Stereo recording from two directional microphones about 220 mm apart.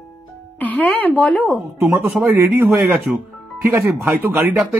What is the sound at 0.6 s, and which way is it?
Speech, 5° left (ahead or behind).